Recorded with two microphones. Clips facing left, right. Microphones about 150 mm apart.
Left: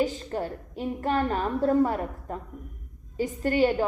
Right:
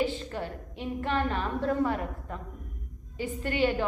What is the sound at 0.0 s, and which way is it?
A woman's voice, 40° left (ahead or behind).